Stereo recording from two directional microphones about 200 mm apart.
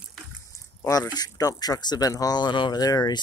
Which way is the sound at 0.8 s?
15° left (ahead or behind).